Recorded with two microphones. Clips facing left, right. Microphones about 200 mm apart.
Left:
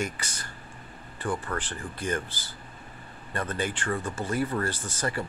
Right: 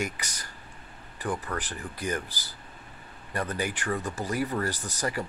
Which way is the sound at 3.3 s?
10° right (ahead or behind).